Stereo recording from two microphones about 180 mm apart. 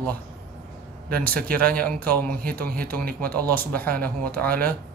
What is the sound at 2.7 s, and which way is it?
Speech, 55° right (ahead or behind).